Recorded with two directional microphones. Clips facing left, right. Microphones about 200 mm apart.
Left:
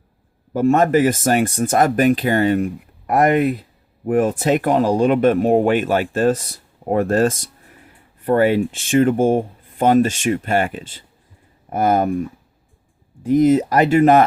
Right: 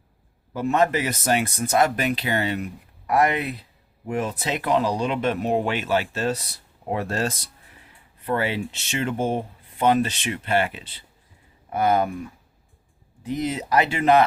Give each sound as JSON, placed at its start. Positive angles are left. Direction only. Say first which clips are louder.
{"t": 0.5, "sound": "speech", "louder": "left 7 dB", "side_deg": 45}
{"t": 13.2, "sound": "speech", "louder": "left 13 dB", "side_deg": 45}